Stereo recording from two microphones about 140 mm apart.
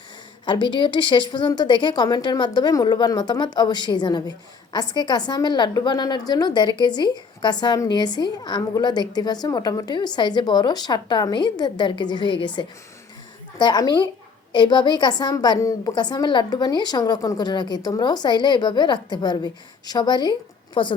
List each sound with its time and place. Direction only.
0.4 s a woman's voice: 30° left (ahead or behind)
13.6 s a woman's voice: 30° left (ahead or behind)